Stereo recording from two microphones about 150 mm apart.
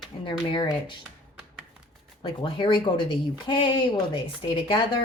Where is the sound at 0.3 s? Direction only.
35° left (ahead or behind).